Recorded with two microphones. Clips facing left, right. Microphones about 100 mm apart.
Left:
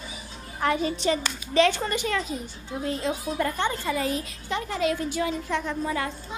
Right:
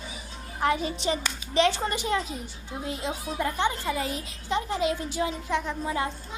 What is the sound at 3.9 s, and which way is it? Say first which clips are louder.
A woman's voice: left 3 dB; 25° right (ahead or behind).